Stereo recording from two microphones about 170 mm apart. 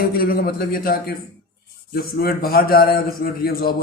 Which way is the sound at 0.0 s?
55° left (ahead or behind).